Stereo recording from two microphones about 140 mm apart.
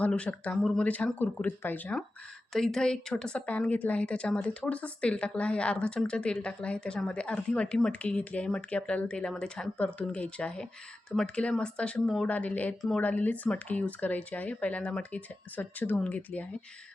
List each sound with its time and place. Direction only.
0.0 s speech: 5° left (ahead or behind)